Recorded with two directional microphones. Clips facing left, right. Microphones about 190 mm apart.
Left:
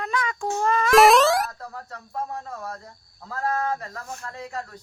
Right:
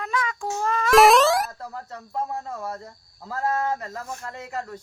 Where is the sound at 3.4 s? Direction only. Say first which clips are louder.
Right 1 dB; 25° right (ahead or behind).